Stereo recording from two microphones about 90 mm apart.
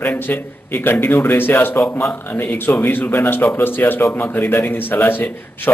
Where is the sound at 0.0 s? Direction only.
25° left (ahead or behind).